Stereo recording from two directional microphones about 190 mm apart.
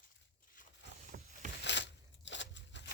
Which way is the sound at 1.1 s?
50° right (ahead or behind).